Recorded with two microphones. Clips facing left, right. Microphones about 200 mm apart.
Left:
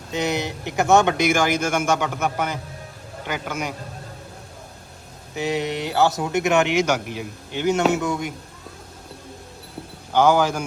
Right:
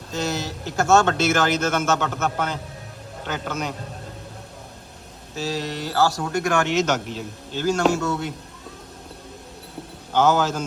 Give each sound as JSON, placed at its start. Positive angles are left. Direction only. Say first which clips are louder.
{"t": 0.1, "sound": "speech", "louder": "left 3 dB", "side_deg": 15}
{"t": 5.3, "sound": "speech", "louder": "left 3 dB", "side_deg": 20}
{"t": 10.1, "sound": "speech", "louder": "left 2 dB", "side_deg": 10}